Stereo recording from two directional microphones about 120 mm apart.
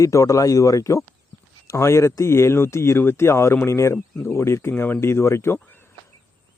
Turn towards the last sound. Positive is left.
turn(degrees=20)  # may be behind; listen again after turning